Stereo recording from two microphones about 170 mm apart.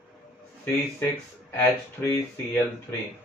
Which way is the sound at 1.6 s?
15° left (ahead or behind).